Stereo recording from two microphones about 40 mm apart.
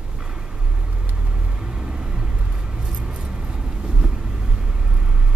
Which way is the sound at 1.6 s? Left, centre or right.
Right.